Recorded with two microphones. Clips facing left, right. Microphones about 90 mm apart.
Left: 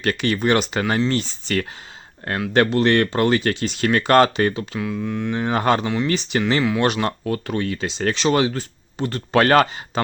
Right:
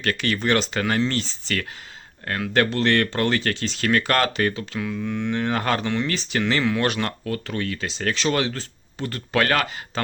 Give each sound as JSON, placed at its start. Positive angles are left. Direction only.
{"t": 0.0, "sound": "speech", "side_deg": 20}
{"t": 5.0, "sound": "speech", "side_deg": 5}
{"t": 5.4, "sound": "speech", "side_deg": 20}
{"t": 5.8, "sound": "speech", "side_deg": 5}
{"t": 6.1, "sound": "speech", "side_deg": 20}
{"t": 6.6, "sound": "speech", "side_deg": 5}
{"t": 6.8, "sound": "speech", "side_deg": 20}
{"t": 9.9, "sound": "a sound", "side_deg": 15}